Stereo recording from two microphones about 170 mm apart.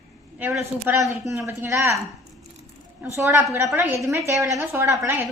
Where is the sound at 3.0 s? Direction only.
5° right (ahead or behind).